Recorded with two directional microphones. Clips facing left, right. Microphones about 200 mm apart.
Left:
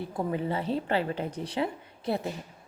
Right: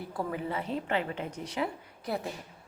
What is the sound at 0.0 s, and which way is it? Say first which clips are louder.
A woman's voice: left 4 dB; 25° left (ahead or behind).